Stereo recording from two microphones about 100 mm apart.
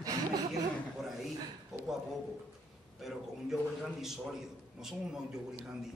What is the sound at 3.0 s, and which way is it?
A man's voice, 5° right (ahead or behind).